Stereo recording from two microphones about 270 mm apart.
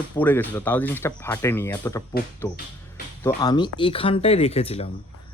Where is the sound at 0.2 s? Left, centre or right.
Centre; by 4.9 s left.